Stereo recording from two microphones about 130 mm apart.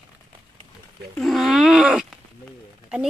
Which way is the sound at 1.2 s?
Centre (ahead or behind).